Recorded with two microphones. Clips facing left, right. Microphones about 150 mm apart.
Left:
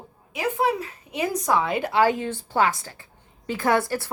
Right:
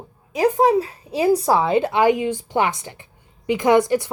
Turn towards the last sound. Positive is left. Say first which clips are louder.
# right 6 dB
turn(degrees=-20)  # may be behind; listen again after turning